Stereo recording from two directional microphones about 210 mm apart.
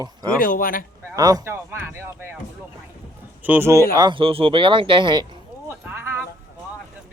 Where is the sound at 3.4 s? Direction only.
10° right (ahead or behind).